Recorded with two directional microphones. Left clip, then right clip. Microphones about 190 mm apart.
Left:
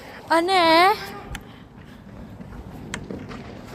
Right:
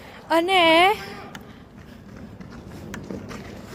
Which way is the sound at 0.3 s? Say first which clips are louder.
Even; 15° right (ahead or behind).